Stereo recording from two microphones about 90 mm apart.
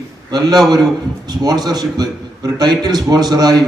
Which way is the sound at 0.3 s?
50° right (ahead or behind).